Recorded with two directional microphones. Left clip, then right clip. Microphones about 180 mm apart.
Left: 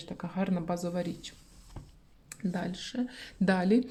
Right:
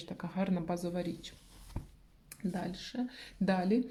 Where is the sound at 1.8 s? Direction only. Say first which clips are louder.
Right 2 dB; 20° right (ahead or behind).